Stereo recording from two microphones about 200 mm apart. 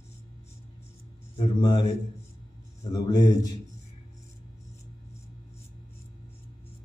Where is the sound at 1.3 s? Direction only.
20° left (ahead or behind).